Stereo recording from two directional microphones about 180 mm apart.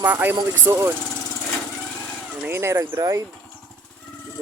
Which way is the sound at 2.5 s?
15° right (ahead or behind).